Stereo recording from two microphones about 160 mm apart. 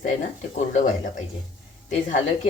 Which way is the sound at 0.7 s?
50° left (ahead or behind).